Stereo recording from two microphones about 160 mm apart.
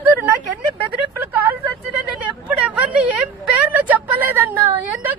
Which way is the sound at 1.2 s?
15° right (ahead or behind).